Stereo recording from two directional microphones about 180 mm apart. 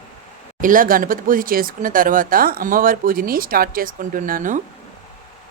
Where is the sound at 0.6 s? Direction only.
50° right (ahead or behind).